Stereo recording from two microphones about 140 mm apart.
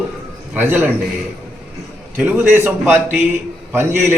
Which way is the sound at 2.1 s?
10° right (ahead or behind).